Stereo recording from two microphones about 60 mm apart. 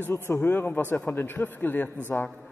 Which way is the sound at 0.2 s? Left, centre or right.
Left.